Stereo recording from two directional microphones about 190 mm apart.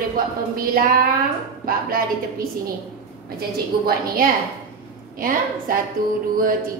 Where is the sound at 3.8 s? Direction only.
50° right (ahead or behind).